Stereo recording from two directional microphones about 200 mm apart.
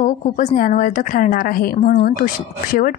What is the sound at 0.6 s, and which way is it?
Speech, 45° left (ahead or behind).